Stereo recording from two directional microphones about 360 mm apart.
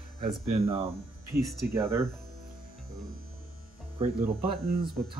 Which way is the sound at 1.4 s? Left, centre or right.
Centre.